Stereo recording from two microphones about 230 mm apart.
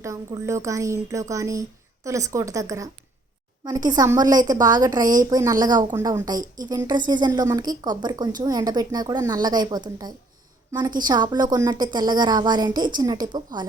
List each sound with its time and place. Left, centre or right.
0.0 s a woman's voice: centre